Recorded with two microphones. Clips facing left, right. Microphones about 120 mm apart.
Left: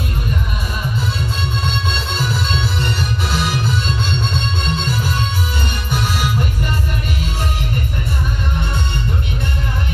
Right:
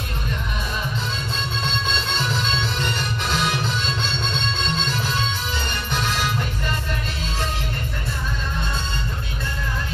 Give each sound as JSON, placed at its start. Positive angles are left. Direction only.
{"t": 1.7, "sound": "music", "side_deg": 5}